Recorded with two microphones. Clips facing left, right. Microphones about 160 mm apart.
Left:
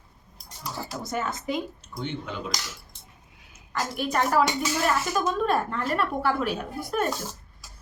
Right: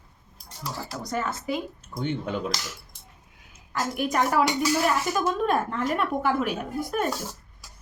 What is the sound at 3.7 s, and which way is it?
Speech, 10° right (ahead or behind).